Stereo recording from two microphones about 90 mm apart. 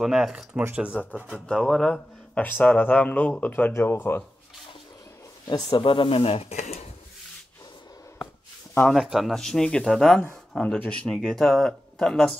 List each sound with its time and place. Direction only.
0.0 s speech: 5° right (ahead or behind)
1.0 s speech: 15° left (ahead or behind)
2.4 s speech: 15° left (ahead or behind)
5.5 s speech: 65° left (ahead or behind); by 6.4 s 90° left
8.8 s speech: centre (ahead or behind)